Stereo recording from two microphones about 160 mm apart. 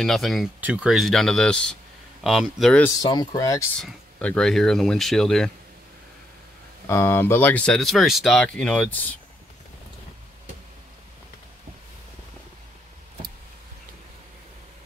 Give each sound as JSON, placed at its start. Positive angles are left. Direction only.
{"t": 0.0, "sound": "speech", "side_deg": 0}
{"t": 0.6, "sound": "speech", "side_deg": -10}
{"t": 3.0, "sound": "speech", "side_deg": 25}
{"t": 3.8, "sound": "speech", "side_deg": 5}
{"t": 6.9, "sound": "speech", "side_deg": 15}